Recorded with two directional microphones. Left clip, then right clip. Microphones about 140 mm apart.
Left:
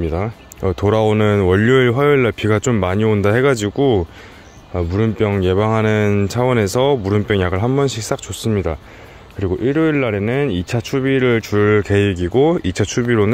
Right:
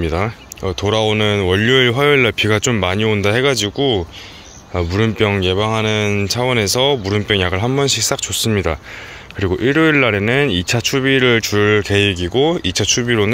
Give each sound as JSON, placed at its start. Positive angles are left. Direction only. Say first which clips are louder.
{"t": 0.0, "sound": "speech", "louder": "right 2 dB", "side_deg": 15}
{"t": 0.6, "sound": "speech", "louder": "left 1 dB", "side_deg": 60}
{"t": 1.8, "sound": "speech", "louder": "right 1 dB", "side_deg": 30}
{"t": 4.8, "sound": "speech", "louder": "right 2 dB", "side_deg": 20}
{"t": 5.4, "sound": "speech", "louder": "even", "side_deg": 45}
{"t": 5.7, "sound": "speech", "louder": "left 1 dB", "side_deg": 60}
{"t": 6.2, "sound": "speech", "louder": "even", "side_deg": 45}
{"t": 8.5, "sound": "speech", "louder": "left 2 dB", "side_deg": 10}